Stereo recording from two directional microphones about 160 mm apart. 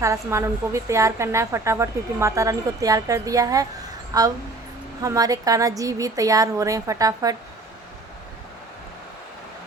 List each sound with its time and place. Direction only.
0.0 s a woman's voice: 20° right (ahead or behind)